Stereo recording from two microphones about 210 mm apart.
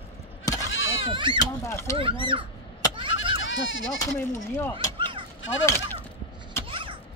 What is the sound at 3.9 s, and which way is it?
Speech, 15° left (ahead or behind).